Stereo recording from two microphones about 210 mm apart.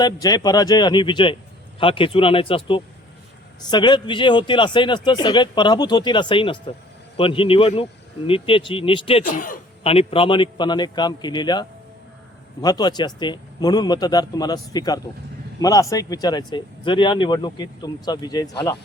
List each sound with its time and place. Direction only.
0.0 s a man's voice: 20° left (ahead or behind)
9.2 s speech: 40° left (ahead or behind)
9.8 s a man's voice: 30° left (ahead or behind)
12.6 s a man's voice: 20° left (ahead or behind)